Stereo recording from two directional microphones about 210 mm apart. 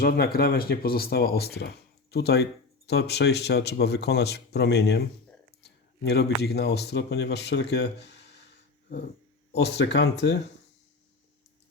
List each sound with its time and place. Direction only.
0.0 s speech: 45° left (ahead or behind)
9.5 s speech: 55° left (ahead or behind)